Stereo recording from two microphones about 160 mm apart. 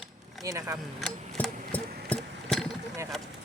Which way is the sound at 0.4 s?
20° right (ahead or behind).